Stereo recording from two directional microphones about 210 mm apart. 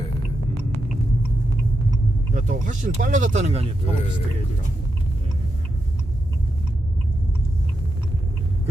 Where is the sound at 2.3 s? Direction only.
35° right (ahead or behind).